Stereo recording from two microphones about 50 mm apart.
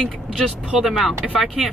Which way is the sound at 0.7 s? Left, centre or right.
Centre.